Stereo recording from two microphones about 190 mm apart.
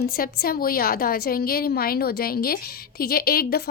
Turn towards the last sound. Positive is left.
turn(degrees=55)  # may be behind; listen again after turning